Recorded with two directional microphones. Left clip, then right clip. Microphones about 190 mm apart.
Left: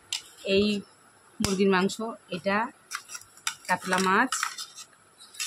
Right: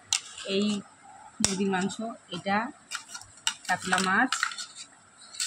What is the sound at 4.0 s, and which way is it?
Speech, 20° left (ahead or behind).